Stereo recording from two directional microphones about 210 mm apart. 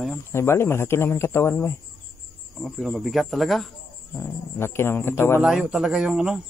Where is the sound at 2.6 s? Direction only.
Centre (ahead or behind).